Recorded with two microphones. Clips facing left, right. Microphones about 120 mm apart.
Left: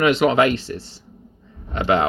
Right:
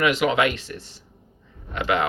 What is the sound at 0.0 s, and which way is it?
Speech, 30° left (ahead or behind).